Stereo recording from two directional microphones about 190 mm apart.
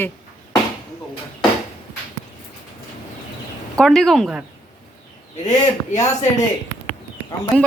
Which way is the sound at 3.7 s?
Centre (ahead or behind).